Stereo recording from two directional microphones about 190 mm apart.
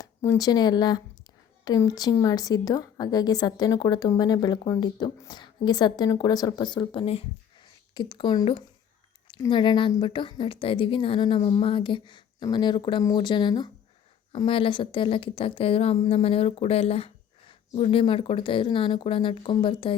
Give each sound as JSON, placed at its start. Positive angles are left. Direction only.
{"t": 0.0, "sound": "a woman's voice", "side_deg": 20}